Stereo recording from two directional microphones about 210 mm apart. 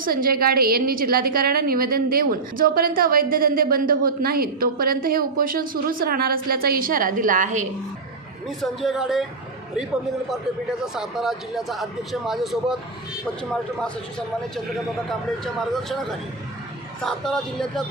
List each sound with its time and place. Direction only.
0.0 s a woman's voice: 45° right (ahead or behind)
8.4 s speech: centre (ahead or behind)
10.2 s speech: centre (ahead or behind)
15.7 s speech: centre (ahead or behind)